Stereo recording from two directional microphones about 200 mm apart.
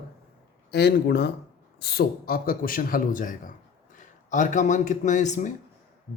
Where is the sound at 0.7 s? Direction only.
55° left (ahead or behind).